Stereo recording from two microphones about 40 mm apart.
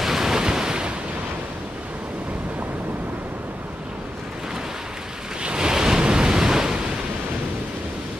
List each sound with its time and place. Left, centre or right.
0.0 s waves: centre
5.4 s waves: right